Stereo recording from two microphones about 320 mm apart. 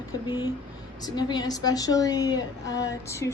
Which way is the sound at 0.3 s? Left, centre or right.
Centre.